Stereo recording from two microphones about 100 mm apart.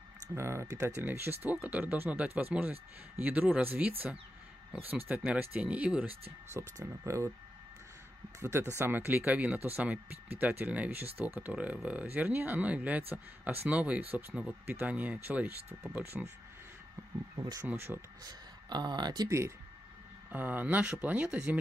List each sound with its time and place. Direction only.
0.3 s speech: 25° right (ahead or behind); by 6.1 s 10° right (ahead or behind)
6.5 s speech: 30° right (ahead or behind)
8.4 s speech: 25° right (ahead or behind)
17.6 s speech: 25° right (ahead or behind)
18.2 s speech: 45° right (ahead or behind)
19.2 s speech: 30° right (ahead or behind)
20.2 s speech: 20° right (ahead or behind)